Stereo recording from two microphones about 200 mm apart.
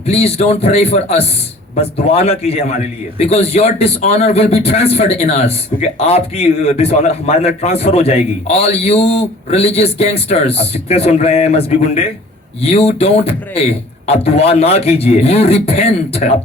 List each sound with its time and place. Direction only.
0.0 s a man's voice: 30° left (ahead or behind)